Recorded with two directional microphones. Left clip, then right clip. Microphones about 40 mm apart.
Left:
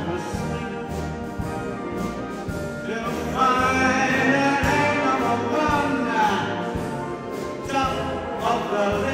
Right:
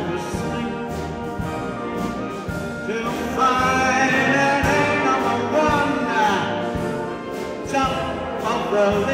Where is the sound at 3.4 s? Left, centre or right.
Centre.